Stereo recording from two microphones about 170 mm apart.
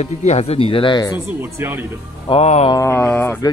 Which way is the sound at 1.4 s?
10° right (ahead or behind).